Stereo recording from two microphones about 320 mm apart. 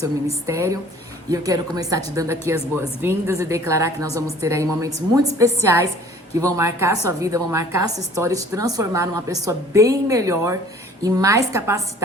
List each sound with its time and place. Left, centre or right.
0.4 s a woman's voice: centre
4.9 s speech: right
5.4 s a woman's voice: centre